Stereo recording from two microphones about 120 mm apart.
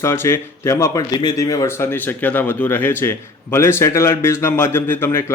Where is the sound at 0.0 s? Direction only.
20° left (ahead or behind).